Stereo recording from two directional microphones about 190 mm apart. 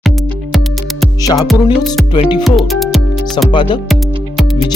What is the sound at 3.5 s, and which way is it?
Speech, 25° left (ahead or behind).